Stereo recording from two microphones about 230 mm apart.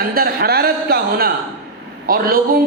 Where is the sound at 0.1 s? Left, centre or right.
Right.